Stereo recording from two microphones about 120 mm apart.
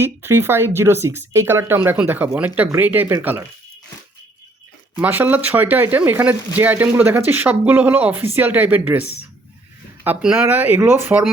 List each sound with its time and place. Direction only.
0.0 s speech: 20° right (ahead or behind)
4.9 s speech: 15° right (ahead or behind)